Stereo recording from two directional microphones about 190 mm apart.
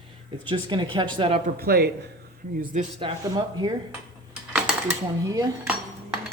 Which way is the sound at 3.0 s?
25° right (ahead or behind).